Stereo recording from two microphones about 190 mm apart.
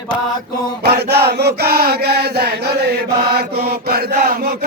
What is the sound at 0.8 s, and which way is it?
Chant, 60° right (ahead or behind).